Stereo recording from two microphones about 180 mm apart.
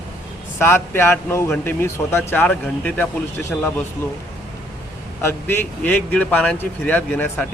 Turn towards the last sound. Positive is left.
turn(degrees=10)  # may be behind; listen again after turning